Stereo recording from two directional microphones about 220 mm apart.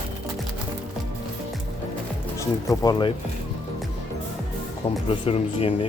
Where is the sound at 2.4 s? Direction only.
15° left (ahead or behind).